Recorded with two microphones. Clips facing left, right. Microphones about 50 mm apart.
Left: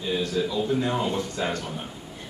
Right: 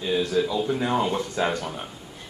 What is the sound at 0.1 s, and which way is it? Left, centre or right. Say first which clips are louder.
A woman's voice: right 3 dB; centre.